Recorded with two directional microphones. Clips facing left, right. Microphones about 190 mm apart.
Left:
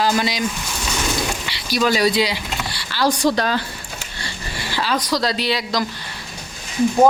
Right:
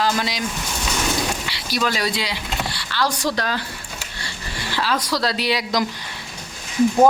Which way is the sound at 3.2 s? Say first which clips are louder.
Left 5 dB; 25° left (ahead or behind).